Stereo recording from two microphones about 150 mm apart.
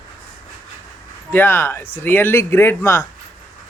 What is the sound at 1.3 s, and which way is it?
Speech, 15° left (ahead or behind).